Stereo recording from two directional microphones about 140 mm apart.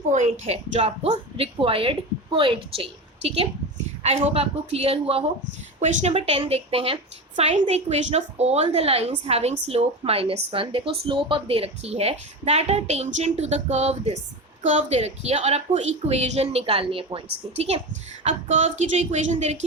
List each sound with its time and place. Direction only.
0.1 s a woman's voice: 55° right (ahead or behind)
1.5 s a woman's voice: 40° right (ahead or behind)
5.8 s a woman's voice: 55° right (ahead or behind)
6.1 s a woman's voice: 40° right (ahead or behind)
18.2 s a woman's voice: 55° right (ahead or behind)